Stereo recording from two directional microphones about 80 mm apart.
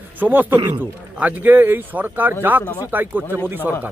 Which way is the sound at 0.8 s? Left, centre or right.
Right.